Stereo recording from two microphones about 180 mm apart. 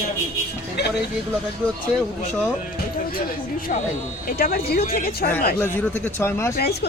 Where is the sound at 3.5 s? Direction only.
50° left (ahead or behind).